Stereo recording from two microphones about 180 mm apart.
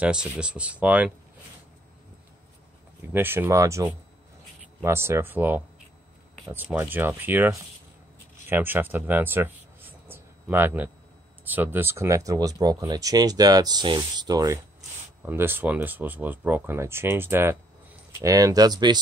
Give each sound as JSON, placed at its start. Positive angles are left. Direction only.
{"t": 0.0, "sound": "speech", "side_deg": -5}
{"t": 3.1, "sound": "speech", "side_deg": -10}